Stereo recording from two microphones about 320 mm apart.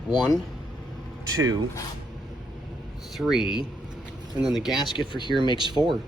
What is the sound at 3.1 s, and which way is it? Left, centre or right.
Speech, centre.